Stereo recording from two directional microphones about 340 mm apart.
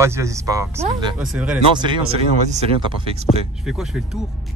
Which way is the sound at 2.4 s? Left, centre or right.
Centre.